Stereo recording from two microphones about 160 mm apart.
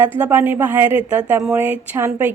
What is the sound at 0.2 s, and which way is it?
Speech, 15° right (ahead or behind).